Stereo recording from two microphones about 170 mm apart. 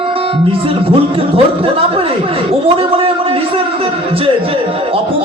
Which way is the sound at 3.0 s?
35° right (ahead or behind).